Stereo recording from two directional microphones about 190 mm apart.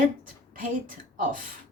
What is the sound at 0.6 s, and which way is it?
Speech, 45° right (ahead or behind).